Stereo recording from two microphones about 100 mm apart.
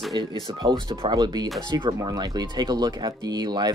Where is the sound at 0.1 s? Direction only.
40° right (ahead or behind).